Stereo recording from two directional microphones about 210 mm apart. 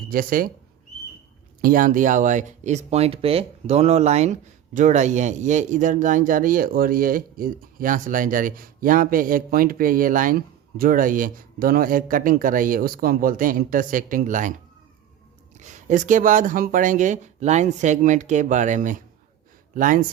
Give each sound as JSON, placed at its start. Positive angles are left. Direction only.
{"t": 0.1, "sound": "speech", "side_deg": -45}
{"t": 1.6, "sound": "speech", "side_deg": -40}
{"t": 15.5, "sound": "speech", "side_deg": -35}